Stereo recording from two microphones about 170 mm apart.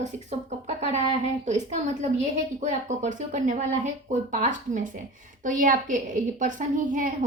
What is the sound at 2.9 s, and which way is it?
A woman's voice, 45° right (ahead or behind).